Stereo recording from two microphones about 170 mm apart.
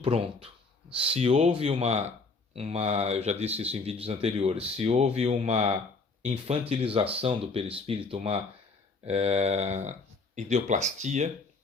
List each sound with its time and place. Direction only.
0.0 s speech: 30° right (ahead or behind)